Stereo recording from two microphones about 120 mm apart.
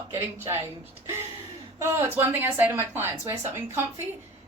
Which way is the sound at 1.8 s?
20° right (ahead or behind).